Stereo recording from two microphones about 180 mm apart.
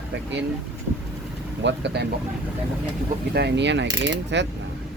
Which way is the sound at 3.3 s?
70° right (ahead or behind).